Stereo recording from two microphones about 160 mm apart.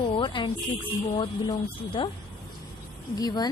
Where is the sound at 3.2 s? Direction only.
25° left (ahead or behind).